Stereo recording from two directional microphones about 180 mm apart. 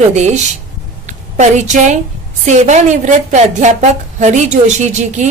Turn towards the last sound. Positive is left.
turn(degrees=-40)  # may be behind; listen again after turning